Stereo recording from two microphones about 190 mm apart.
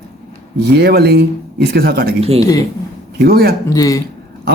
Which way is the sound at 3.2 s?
55° right (ahead or behind).